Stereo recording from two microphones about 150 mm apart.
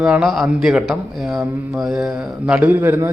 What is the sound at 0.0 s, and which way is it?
Speech, 5° right (ahead or behind).